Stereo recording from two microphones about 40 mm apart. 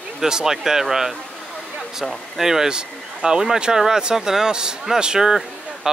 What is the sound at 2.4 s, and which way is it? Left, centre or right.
Speech, centre.